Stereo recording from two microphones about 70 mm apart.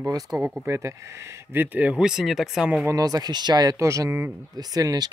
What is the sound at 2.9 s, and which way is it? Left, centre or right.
Speech, right.